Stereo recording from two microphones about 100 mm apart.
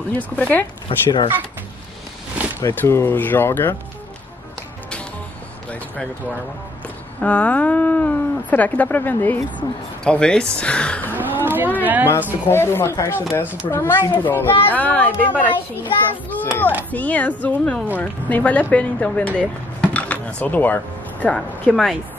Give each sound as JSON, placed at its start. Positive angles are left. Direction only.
{"t": 0.1, "sound": "speech", "side_deg": 15}
{"t": 0.8, "sound": "speech", "side_deg": 60}
{"t": 2.7, "sound": "speech", "side_deg": 20}
{"t": 7.2, "sound": "speech", "side_deg": 15}
{"t": 11.1, "sound": "a sound", "side_deg": -20}
{"t": 11.8, "sound": "a woman's voice", "side_deg": -15}
{"t": 12.4, "sound": "a child's voice", "side_deg": 25}